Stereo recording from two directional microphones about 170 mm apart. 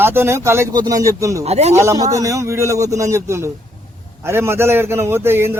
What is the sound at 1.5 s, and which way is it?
Speech, 40° right (ahead or behind).